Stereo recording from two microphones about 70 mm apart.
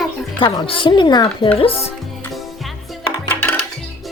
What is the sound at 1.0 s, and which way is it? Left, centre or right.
Speech, left.